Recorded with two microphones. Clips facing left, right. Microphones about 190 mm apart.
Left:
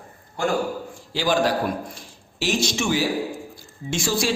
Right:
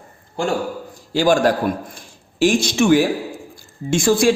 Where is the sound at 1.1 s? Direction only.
45° right (ahead or behind).